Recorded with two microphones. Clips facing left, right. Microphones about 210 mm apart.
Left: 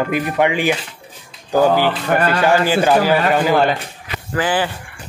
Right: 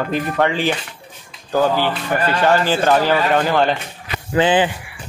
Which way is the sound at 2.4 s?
10° left (ahead or behind).